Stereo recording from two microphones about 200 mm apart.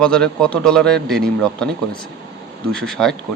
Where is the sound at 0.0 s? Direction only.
5° left (ahead or behind).